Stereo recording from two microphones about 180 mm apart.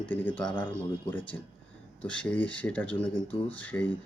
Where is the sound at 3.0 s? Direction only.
30° left (ahead or behind).